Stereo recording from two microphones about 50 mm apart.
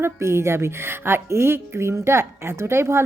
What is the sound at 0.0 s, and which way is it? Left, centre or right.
A woman's voice, right.